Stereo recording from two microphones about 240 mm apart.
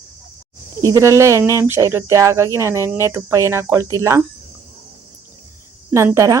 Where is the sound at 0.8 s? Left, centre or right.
Centre.